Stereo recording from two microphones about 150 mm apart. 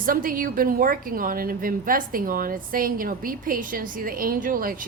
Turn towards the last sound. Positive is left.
turn(degrees=-70)  # may be behind; listen again after turning